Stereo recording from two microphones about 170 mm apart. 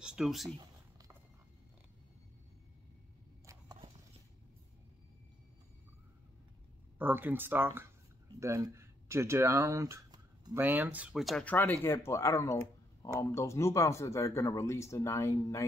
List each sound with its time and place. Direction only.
0.0 s speech: 5° right (ahead or behind)
7.0 s speech: 10° right (ahead or behind)
10.6 s speech: 10° right (ahead or behind); by 15.6 s 15° left (ahead or behind)